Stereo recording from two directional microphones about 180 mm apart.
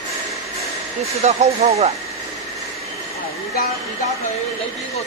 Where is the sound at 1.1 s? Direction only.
35° right (ahead or behind).